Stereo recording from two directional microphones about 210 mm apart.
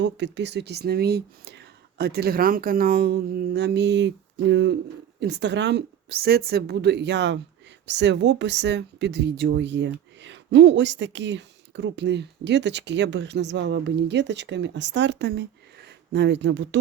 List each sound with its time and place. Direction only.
0.0 s speech: 55° right (ahead or behind)